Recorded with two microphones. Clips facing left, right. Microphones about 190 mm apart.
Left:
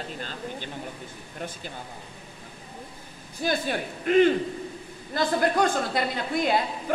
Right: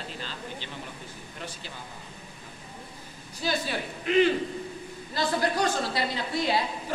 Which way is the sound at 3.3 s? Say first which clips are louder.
Left 3 dB; 50° left (ahead or behind).